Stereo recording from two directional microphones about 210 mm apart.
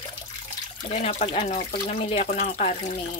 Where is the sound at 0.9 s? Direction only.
35° left (ahead or behind).